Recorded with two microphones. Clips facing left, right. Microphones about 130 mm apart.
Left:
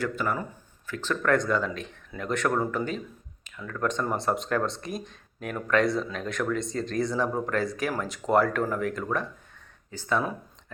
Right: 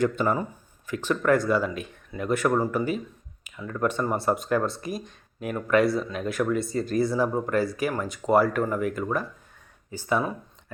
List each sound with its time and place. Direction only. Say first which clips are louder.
0.0 s speech: right 5 dB; 20° right (ahead or behind)